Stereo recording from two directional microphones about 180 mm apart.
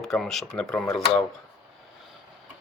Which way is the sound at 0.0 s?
Centre (ahead or behind).